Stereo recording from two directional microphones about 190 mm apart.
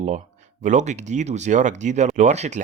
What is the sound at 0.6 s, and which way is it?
Speech, 40° right (ahead or behind).